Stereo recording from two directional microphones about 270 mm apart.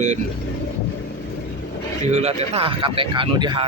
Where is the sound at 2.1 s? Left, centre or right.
Right.